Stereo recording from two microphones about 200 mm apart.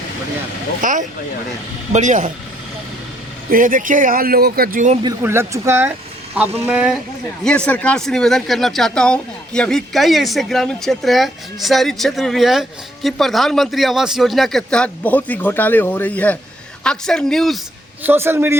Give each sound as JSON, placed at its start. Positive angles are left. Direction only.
{"t": 0.8, "sound": "speech", "side_deg": -40}
{"t": 3.5, "sound": "a man's voice", "side_deg": -45}
{"t": 5.0, "sound": "speech", "side_deg": -10}
{"t": 7.4, "sound": "speech", "side_deg": 5}
{"t": 18.0, "sound": "speech", "side_deg": -10}